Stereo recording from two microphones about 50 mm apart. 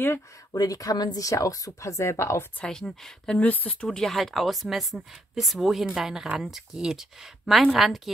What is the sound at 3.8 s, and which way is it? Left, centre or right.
Speech, centre.